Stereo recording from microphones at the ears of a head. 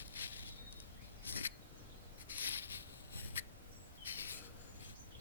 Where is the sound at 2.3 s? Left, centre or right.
Left.